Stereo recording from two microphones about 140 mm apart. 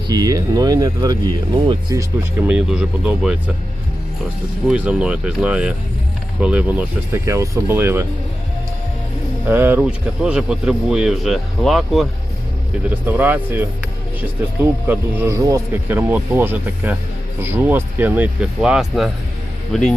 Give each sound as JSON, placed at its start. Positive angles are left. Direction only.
{"t": 0.1, "sound": "speech", "side_deg": -25}
{"t": 2.5, "sound": "speech", "side_deg": -5}
{"t": 4.7, "sound": "speech", "side_deg": -5}
{"t": 9.5, "sound": "a man's voice", "side_deg": -15}
{"t": 12.9, "sound": "speech", "side_deg": -10}
{"t": 14.8, "sound": "speech", "side_deg": -20}